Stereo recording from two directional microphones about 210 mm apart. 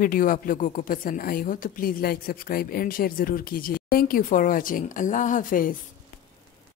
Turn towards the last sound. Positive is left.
turn(degrees=40)  # may be behind; listen again after turning